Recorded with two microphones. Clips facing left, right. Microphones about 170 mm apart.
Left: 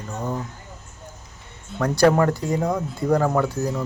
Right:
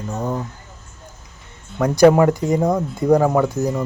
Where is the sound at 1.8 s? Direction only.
15° right (ahead or behind).